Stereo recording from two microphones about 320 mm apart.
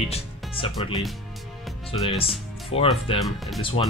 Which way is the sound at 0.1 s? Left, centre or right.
Centre.